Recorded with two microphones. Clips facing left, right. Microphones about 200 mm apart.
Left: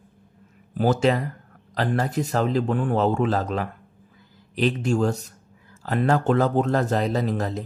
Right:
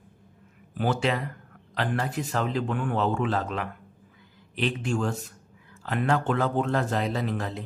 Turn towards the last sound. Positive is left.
turn(degrees=40)  # may be behind; listen again after turning